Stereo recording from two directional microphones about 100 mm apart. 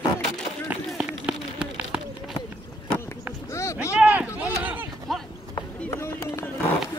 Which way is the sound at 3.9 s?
10° right (ahead or behind).